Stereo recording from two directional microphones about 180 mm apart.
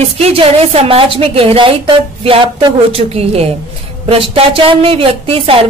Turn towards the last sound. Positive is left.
turn(degrees=-30)  # may be behind; listen again after turning